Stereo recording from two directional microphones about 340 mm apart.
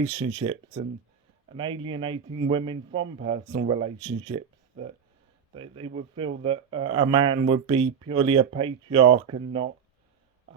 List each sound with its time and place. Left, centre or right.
0.0 s speech: centre